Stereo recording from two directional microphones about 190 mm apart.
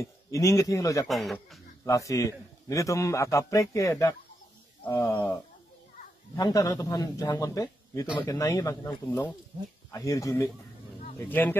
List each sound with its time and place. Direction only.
0.0 s a man's voice: 15° left (ahead or behind)
1.0 s speech: centre (ahead or behind)
1.9 s speech: 15° left (ahead or behind)